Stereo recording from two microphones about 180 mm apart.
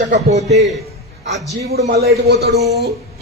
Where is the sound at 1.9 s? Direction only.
60° right (ahead or behind).